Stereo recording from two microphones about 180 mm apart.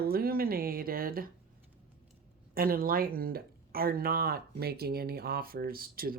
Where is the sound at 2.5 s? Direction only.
55° right (ahead or behind).